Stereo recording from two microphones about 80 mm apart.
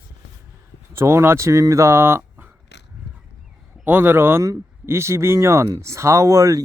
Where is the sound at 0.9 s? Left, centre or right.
Right.